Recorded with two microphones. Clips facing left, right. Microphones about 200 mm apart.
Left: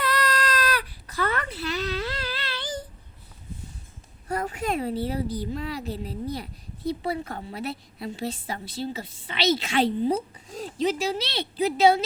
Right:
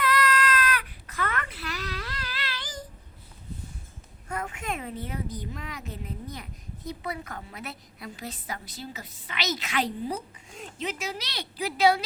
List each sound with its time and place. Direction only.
0.0 s baby cry: 30° left (ahead or behind)
4.3 s a woman's voice: 35° left (ahead or behind)